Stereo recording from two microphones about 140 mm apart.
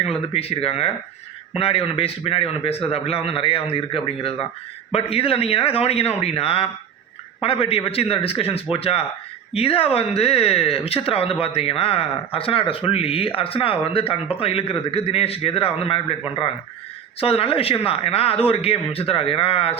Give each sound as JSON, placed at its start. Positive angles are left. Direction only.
{"t": 0.0, "sound": "speech", "side_deg": 45}